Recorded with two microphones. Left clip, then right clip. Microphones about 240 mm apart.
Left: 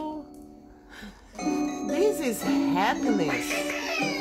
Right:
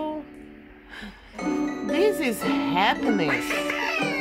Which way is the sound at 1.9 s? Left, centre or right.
Centre.